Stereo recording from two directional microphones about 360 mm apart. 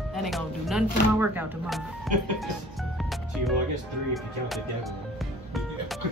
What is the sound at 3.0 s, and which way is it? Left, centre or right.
Music, centre.